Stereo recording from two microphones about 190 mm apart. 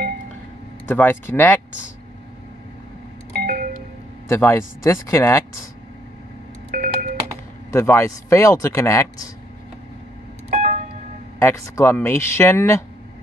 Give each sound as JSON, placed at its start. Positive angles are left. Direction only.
{"t": 0.8, "sound": "speech", "side_deg": 10}
{"t": 3.3, "sound": "doorbell", "side_deg": -50}
{"t": 4.3, "sound": "speech", "side_deg": 15}
{"t": 6.7, "sound": "a sound", "side_deg": -45}
{"t": 7.7, "sound": "speech", "side_deg": 15}
{"t": 10.5, "sound": "a sound", "side_deg": -45}
{"t": 11.3, "sound": "speech", "side_deg": 15}